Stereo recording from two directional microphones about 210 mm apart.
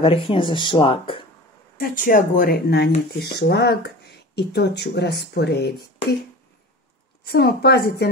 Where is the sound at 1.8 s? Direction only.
45° left (ahead or behind).